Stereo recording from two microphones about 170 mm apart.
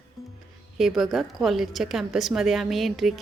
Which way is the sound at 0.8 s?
Centre (ahead or behind).